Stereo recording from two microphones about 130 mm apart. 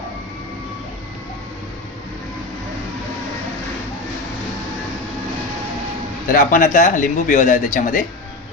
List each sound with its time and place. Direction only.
6.3 s speech: 85° left